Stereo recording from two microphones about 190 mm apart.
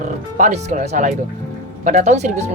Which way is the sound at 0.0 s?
40° right (ahead or behind).